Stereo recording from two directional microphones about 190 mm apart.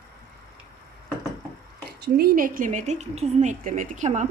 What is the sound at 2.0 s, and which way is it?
A woman's voice, 55° right (ahead or behind).